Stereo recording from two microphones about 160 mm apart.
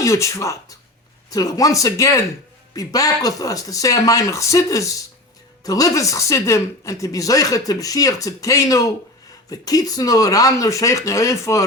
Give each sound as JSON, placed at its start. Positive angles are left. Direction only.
{"t": 0.0, "sound": "speech", "side_deg": 20}